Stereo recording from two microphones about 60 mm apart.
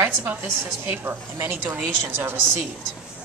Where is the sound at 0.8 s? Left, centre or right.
Right.